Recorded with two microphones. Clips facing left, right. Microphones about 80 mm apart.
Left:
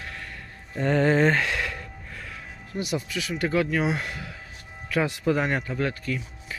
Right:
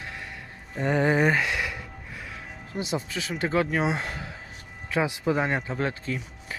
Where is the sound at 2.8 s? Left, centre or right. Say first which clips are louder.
Left 1 dB; right.